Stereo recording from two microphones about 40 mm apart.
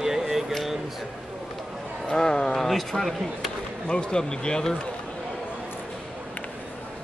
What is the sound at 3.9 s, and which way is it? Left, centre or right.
Speech, left.